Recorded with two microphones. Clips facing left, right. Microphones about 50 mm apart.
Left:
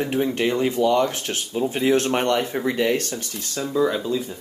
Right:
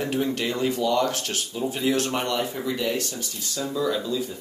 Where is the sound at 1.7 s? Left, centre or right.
Left.